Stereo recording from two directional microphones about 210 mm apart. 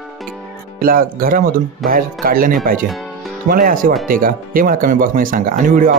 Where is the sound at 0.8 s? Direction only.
45° right (ahead or behind).